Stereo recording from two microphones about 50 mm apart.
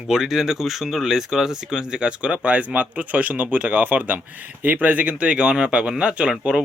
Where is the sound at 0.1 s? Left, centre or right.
Centre.